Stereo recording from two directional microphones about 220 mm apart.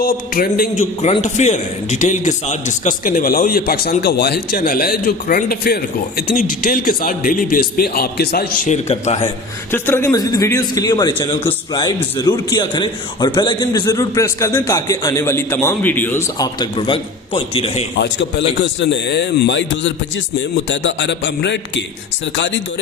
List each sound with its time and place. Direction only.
0.0 s a man's voice: 40° left (ahead or behind)
9.7 s a man's voice: 10° left (ahead or behind)
18.0 s a man's voice: 55° left (ahead or behind)